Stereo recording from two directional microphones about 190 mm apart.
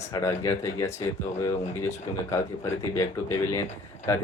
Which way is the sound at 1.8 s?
15° left (ahead or behind).